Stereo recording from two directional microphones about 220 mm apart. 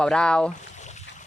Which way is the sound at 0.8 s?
30° left (ahead or behind).